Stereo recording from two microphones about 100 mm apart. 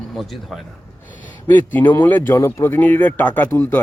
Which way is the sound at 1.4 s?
20° left (ahead or behind).